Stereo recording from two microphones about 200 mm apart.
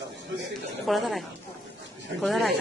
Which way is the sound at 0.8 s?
Centre (ahead or behind).